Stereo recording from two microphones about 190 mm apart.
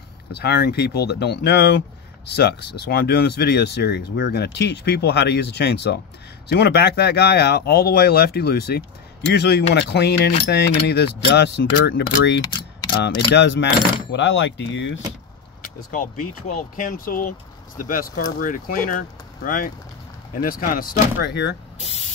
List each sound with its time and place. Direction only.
0.3 s speech: 60° left (ahead or behind); by 15.0 s 75° left (ahead or behind)
15.6 s speech: 45° left (ahead or behind); by 21.5 s 60° left (ahead or behind)
21.7 s speech: 35° left (ahead or behind)